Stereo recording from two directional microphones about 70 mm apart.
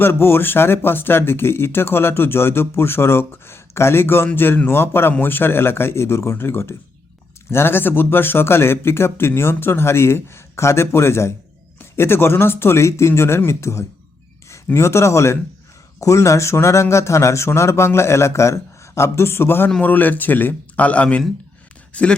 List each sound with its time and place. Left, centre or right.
0.0 s speech: left; by 22.1 s centre